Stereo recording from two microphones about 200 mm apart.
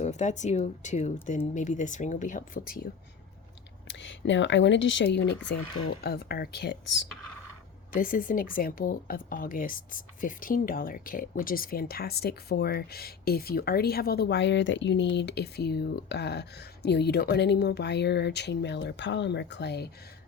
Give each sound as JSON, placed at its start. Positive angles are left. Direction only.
{"t": 0.0, "sound": "speech", "side_deg": 35}
{"t": 3.8, "sound": "a woman's voice", "side_deg": 65}
{"t": 7.9, "sound": "a woman's voice", "side_deg": 45}